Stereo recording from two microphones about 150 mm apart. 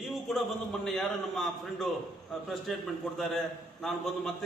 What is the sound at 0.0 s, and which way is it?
A man's voice, centre (ahead or behind).